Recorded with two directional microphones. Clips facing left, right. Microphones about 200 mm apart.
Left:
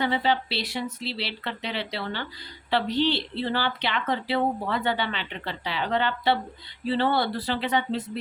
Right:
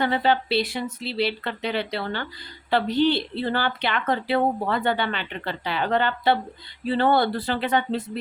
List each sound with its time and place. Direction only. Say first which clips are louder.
0.0 s a woman's voice: right 3 dB; 50° right (ahead or behind)